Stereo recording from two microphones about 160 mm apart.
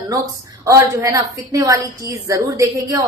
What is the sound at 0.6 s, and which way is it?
A woman's voice, 20° right (ahead or behind).